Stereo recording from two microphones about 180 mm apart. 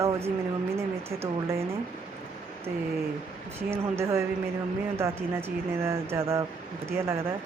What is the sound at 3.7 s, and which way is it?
Speech, 15° right (ahead or behind).